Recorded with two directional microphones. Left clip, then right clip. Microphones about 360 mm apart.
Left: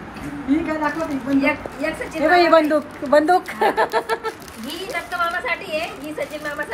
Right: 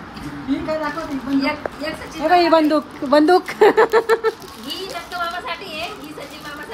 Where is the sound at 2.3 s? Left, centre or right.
Centre.